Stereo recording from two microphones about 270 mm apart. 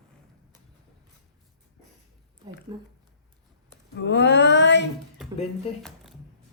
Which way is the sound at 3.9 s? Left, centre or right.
Left.